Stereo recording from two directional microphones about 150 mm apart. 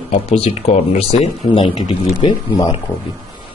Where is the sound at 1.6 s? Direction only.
30° left (ahead or behind).